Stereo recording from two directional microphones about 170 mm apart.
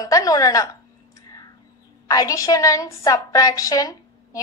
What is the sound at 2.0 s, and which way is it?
A woman's voice, 20° left (ahead or behind).